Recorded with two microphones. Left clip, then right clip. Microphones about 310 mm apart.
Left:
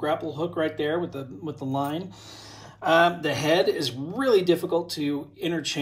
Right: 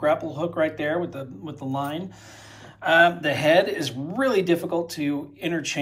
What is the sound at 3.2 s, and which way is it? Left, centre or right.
Speech, centre.